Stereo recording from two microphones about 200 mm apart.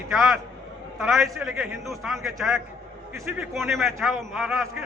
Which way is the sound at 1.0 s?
Centre (ahead or behind).